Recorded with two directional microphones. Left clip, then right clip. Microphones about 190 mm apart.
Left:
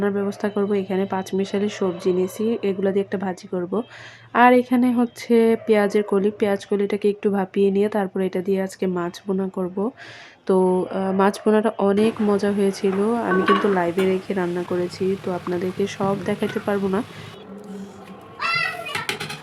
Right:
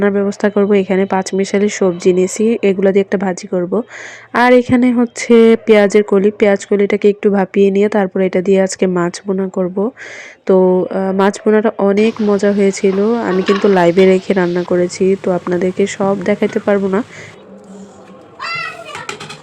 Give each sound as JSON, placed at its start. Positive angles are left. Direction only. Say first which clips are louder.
{"t": 0.0, "sound": "speech", "louder": "right 9 dB", "side_deg": -25}
{"t": 13.7, "sound": "speech", "louder": "right 11 dB", "side_deg": -35}